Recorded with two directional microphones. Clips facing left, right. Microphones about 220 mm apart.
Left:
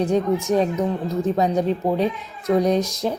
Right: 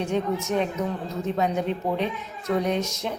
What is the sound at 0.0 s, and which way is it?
Speech, 35° left (ahead or behind).